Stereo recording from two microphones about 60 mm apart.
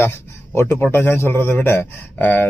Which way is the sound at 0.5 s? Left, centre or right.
Left.